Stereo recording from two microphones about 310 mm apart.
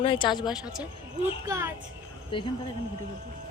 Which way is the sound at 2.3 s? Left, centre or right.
Centre.